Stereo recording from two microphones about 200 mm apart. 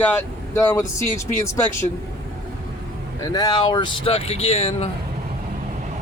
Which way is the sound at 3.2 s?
20° left (ahead or behind).